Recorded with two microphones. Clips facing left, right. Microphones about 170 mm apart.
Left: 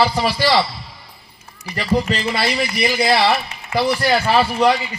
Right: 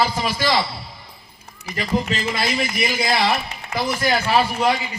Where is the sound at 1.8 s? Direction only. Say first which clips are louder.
Left 3 dB; 45° right (ahead or behind).